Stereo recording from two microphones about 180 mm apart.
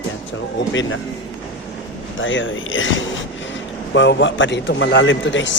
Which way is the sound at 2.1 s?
90° left.